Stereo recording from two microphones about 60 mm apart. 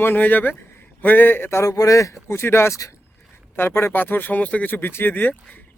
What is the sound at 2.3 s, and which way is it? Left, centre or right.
A man's voice, left.